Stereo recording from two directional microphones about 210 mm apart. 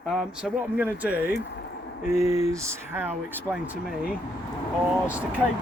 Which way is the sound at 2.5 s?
15° right (ahead or behind).